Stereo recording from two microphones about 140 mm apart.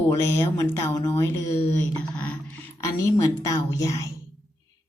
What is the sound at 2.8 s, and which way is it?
A woman's voice, 25° left (ahead or behind).